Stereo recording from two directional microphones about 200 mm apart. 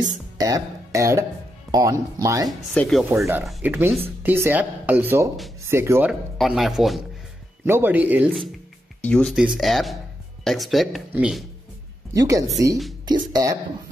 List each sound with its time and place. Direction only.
0.0 s speech: 15° right (ahead or behind)
2.7 s speech: 5° left (ahead or behind)
3.4 s speech: 10° right (ahead or behind)
6.3 s speech: centre (ahead or behind)
9.0 s speech: 5° left (ahead or behind)
12.1 s speech: 15° right (ahead or behind)